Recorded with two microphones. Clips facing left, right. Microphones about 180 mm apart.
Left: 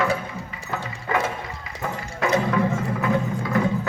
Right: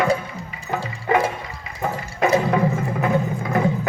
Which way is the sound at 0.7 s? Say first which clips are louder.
Right 6 dB; 15° right (ahead or behind).